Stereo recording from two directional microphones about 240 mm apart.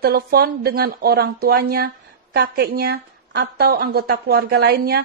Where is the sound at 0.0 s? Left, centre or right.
Right.